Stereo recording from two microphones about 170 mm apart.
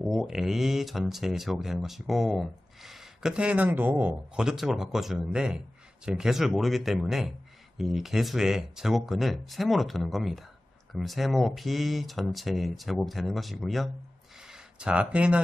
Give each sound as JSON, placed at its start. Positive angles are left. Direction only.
{"t": 0.0, "sound": "speech", "side_deg": 0}